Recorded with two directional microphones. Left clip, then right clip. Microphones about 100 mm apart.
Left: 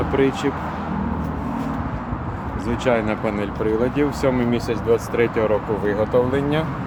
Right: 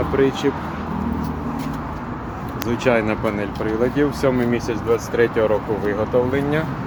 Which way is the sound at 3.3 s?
5° left (ahead or behind).